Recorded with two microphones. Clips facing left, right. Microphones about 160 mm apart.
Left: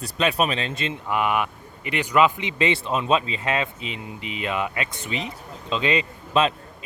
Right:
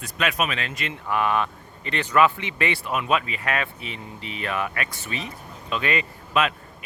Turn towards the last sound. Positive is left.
turn(degrees=25)  # may be behind; listen again after turning